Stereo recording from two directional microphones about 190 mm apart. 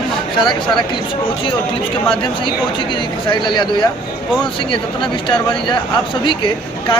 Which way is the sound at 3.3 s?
25° left (ahead or behind).